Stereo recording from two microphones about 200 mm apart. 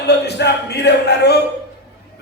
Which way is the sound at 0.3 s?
55° left (ahead or behind).